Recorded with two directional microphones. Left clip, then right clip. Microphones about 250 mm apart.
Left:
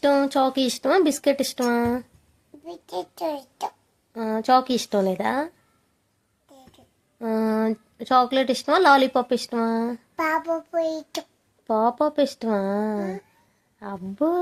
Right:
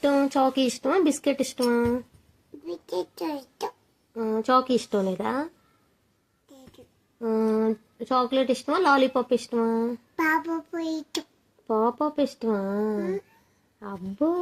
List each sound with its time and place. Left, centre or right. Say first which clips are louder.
0.0 s speech: left 2 dB; left
2.6 s a child's voice: right 1 dB; centre
4.1 s speech: left 3 dB; left
7.2 s speech: even; left
10.2 s child singing: left 1 dB; centre
11.6 s speech: left 3 dB; left
13.0 s speech: right 1 dB; centre
13.7 s speech: left 2 dB; left